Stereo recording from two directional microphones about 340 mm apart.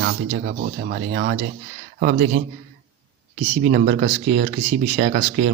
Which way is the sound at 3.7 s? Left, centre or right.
Right.